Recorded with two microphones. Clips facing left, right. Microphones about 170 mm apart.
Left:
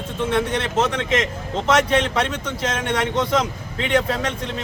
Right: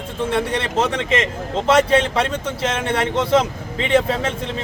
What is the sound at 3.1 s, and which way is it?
Speech, 30° right (ahead or behind).